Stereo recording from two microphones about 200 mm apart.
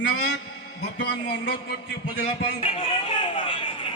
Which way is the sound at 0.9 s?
55° left (ahead or behind).